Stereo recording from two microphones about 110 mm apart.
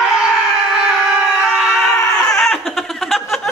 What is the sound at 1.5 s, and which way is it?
Screaming, centre (ahead or behind).